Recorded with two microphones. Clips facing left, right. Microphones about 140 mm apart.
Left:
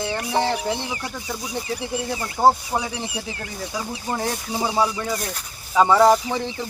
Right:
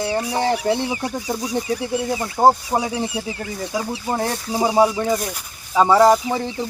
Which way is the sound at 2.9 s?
40° right (ahead or behind).